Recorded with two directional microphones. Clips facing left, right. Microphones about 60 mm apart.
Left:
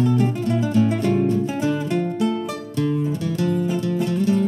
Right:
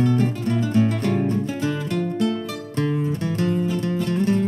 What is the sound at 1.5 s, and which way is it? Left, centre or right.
Music, centre.